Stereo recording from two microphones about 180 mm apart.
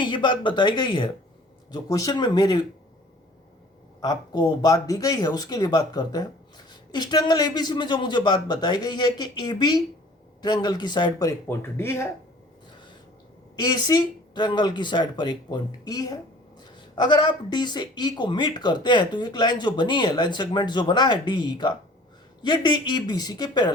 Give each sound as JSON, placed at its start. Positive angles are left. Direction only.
{"t": 0.0, "sound": "speech", "side_deg": 25}
{"t": 4.0, "sound": "speech", "side_deg": 20}
{"t": 13.6, "sound": "speech", "side_deg": 20}